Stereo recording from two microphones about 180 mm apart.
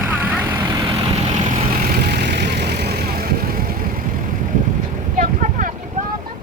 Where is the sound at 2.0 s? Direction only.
60° right (ahead or behind).